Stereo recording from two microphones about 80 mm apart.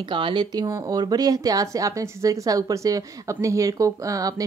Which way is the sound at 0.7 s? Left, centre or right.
Right.